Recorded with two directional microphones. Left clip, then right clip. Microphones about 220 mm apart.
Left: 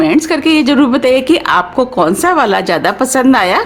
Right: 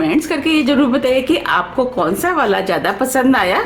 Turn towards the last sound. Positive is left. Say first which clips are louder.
# left 4 dB
turn(degrees=40)  # may be behind; listen again after turning